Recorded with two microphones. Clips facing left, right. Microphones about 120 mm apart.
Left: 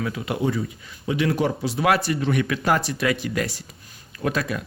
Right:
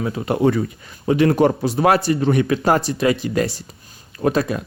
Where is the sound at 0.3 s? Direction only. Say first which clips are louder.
Right 9 dB; 60° right (ahead or behind).